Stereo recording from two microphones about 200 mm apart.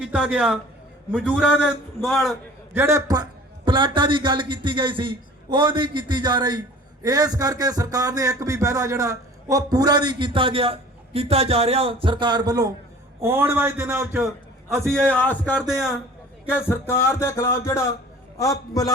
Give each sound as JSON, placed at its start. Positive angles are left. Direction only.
{"t": 0.0, "sound": "a man's voice", "side_deg": -5}
{"t": 2.7, "sound": "a man's voice", "side_deg": -15}
{"t": 3.7, "sound": "a sound", "side_deg": -25}
{"t": 13.2, "sound": "a man's voice", "side_deg": -10}
{"t": 14.8, "sound": "music", "side_deg": 5}
{"t": 16.6, "sound": "music", "side_deg": 15}